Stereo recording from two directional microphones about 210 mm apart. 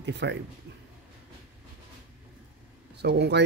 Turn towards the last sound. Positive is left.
turn(degrees=-50)  # may be behind; listen again after turning